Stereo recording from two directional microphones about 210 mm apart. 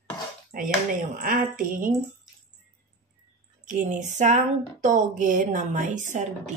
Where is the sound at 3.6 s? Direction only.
40° right (ahead or behind).